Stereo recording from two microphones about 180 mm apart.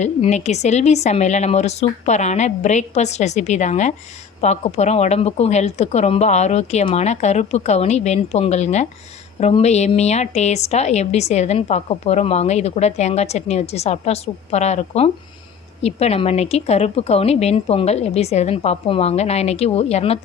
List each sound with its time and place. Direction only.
0.0 s a woman's voice: 40° left (ahead or behind)